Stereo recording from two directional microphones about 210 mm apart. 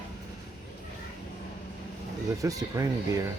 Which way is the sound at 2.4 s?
15° right (ahead or behind).